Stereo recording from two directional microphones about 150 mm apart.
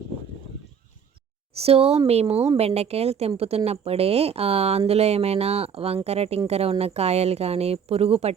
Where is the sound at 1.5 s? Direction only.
40° right (ahead or behind).